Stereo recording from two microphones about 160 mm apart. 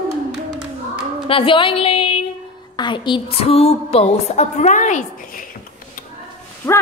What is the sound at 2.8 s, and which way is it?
A woman's voice, 30° left (ahead or behind).